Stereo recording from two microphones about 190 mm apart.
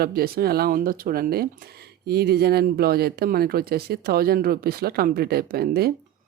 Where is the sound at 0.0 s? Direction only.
50° right (ahead or behind).